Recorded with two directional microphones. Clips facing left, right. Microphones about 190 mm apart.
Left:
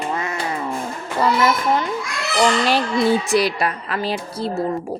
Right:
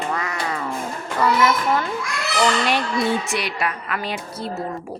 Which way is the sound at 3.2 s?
35° left (ahead or behind).